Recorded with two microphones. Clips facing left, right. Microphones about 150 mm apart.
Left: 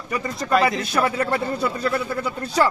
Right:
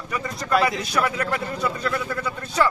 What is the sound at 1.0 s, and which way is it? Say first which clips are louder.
A man's voice: left 2 dB; 30° left (ahead or behind).